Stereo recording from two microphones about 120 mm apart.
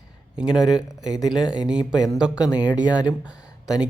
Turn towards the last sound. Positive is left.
turn(degrees=-5)  # may be behind; listen again after turning